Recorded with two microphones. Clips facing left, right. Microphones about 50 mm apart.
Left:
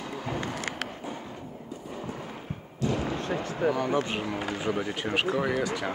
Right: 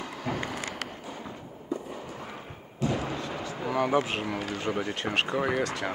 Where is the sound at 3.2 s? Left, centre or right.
Left.